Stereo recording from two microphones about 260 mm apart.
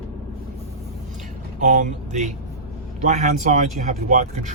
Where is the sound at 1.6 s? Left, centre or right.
Right.